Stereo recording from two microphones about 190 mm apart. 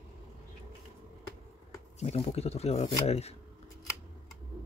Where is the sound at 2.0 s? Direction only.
35° left (ahead or behind).